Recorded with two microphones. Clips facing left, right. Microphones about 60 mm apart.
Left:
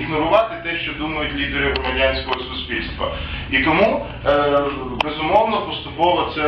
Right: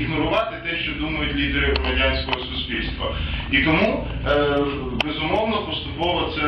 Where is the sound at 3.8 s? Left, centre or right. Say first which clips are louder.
Left 4 dB; left.